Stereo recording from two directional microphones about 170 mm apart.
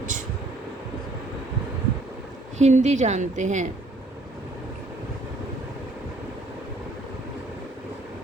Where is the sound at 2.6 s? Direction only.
45° right (ahead or behind).